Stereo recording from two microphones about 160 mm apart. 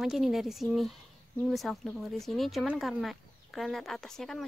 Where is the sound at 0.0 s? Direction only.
Centre (ahead or behind).